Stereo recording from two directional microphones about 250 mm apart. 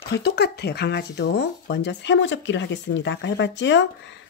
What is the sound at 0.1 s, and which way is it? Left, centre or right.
Speech, left.